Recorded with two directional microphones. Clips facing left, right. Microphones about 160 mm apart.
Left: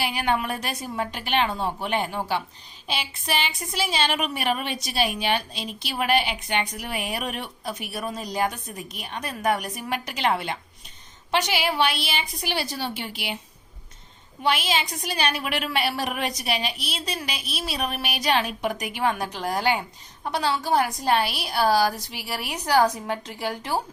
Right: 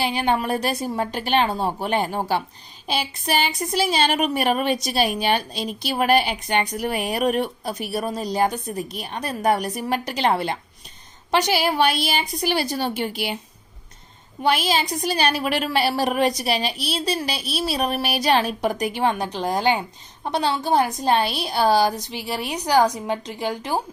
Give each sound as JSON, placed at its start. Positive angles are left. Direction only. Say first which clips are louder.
{"t": 0.0, "sound": "a woman's voice", "louder": "right 3 dB", "side_deg": -25}
{"t": 14.4, "sound": "a woman's voice", "louder": "right 4 dB", "side_deg": -40}